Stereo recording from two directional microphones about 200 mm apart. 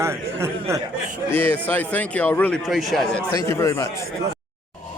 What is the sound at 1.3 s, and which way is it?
Speech, 10° left (ahead or behind).